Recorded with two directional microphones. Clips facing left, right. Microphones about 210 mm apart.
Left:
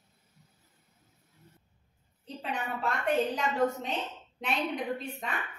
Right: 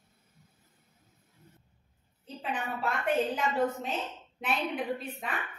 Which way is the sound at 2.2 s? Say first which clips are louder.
Even; 5° right (ahead or behind).